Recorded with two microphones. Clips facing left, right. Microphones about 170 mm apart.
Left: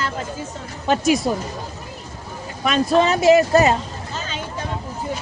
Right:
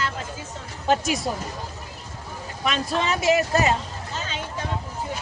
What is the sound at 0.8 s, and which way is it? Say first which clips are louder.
Speech: left 5 dB; 70° left (ahead or behind).